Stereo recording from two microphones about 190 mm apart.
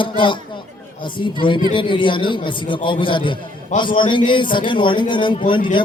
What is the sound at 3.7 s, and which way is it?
Speech, 40° left (ahead or behind).